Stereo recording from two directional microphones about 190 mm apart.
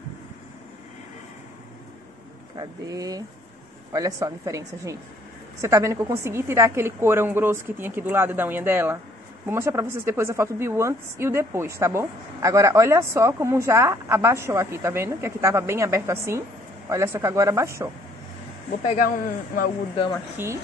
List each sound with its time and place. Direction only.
2.5 s a woman's voice: 20° right (ahead or behind)
18.9 s a man's voice: 50° left (ahead or behind)